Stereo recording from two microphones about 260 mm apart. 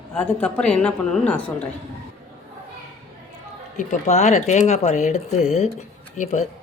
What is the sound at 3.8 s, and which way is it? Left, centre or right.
Speech, left.